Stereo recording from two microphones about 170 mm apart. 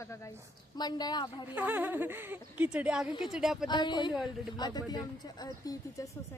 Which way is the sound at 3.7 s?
25° left (ahead or behind).